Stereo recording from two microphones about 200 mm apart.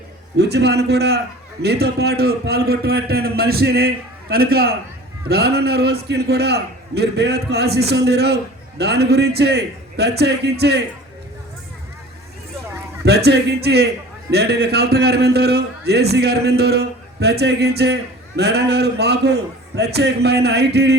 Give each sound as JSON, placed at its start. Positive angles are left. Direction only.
{"t": 0.3, "sound": "a man's voice", "side_deg": -55}
{"t": 13.1, "sound": "a man's voice", "side_deg": -55}